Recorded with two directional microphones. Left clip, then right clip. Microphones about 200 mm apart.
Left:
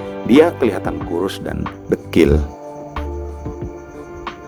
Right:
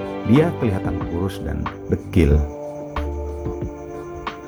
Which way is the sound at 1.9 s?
45° left (ahead or behind).